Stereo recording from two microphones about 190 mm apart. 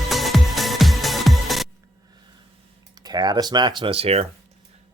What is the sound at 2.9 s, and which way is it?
Speech, 20° right (ahead or behind).